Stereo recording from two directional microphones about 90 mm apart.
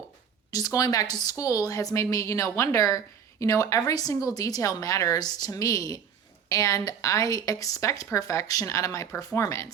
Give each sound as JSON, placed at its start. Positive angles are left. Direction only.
{"t": 0.5, "sound": "speech", "side_deg": 40}